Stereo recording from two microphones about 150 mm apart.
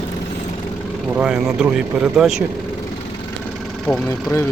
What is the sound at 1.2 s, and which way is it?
Speech, 5° right (ahead or behind).